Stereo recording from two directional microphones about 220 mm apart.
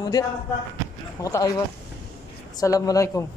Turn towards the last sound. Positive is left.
turn(degrees=15)  # may be behind; listen again after turning